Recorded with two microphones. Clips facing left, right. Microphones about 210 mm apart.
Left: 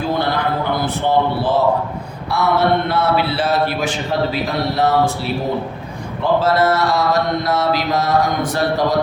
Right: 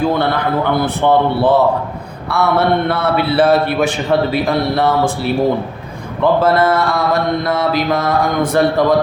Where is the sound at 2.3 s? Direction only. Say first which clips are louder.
Right 2 dB; 60° right (ahead or behind).